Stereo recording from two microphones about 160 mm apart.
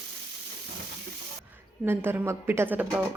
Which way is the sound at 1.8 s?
15° right (ahead or behind).